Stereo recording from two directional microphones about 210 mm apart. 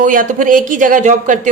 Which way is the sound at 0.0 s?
40° right (ahead or behind).